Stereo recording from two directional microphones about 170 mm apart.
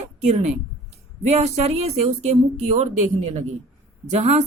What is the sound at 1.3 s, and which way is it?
Speech, 40° right (ahead or behind).